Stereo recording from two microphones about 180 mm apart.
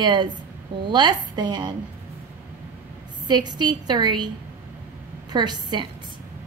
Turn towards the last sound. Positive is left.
turn(degrees=-25)  # may be behind; listen again after turning